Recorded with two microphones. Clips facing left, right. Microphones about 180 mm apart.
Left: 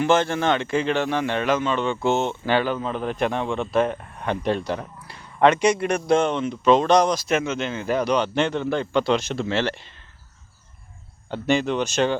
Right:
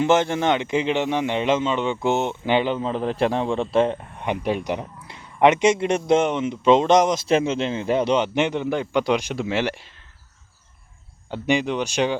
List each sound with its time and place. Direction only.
0.0 s speech: 20° right (ahead or behind)
4.3 s speech: 15° right (ahead or behind)
11.3 s speech: 15° right (ahead or behind)